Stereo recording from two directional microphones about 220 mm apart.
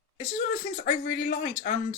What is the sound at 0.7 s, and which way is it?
Speech, 35° left (ahead or behind).